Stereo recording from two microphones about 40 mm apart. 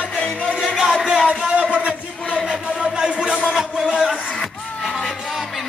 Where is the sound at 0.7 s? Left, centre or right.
Centre.